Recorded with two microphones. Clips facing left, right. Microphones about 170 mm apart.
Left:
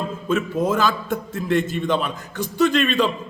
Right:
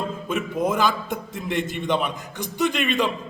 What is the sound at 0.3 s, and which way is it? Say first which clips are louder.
A man's voice: left 4 dB; 15° right (ahead or behind).